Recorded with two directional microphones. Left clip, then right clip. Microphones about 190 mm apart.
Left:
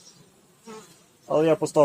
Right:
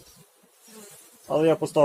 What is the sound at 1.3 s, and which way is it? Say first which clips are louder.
Speech: left 1 dB; 15° left (ahead or behind).